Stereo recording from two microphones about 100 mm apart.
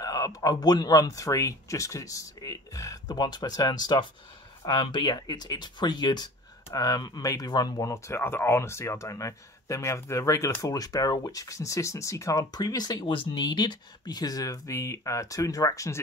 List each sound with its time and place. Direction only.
0.0 s speech: 40° left (ahead or behind)
13.0 s speech: 60° left (ahead or behind); by 16.0 s 30° left (ahead or behind)